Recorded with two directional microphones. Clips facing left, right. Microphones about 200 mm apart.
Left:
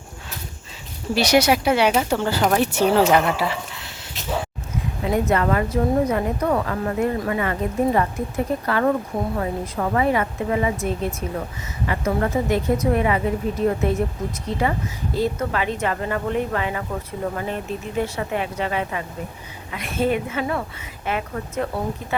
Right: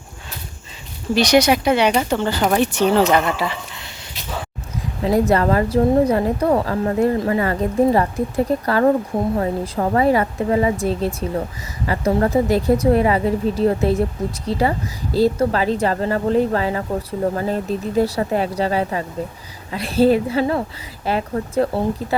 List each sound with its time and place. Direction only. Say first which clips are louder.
1.1 s speech: right 3 dB; 5° left (ahead or behind)
5.3 s speech: right 4 dB; 35° right (ahead or behind)
8.6 s speech: right 4 dB; 35° right (ahead or behind)